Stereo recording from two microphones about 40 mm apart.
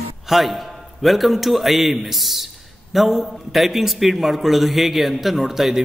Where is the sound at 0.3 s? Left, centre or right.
Centre.